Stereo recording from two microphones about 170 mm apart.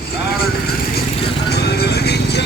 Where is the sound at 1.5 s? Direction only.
75° left (ahead or behind).